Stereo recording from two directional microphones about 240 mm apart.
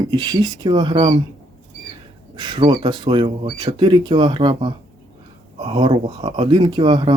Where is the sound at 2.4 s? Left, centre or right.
Centre.